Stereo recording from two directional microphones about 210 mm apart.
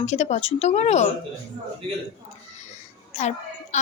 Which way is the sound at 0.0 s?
30° left (ahead or behind).